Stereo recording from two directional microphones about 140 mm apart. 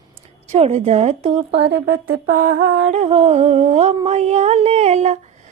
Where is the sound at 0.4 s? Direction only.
50° right (ahead or behind).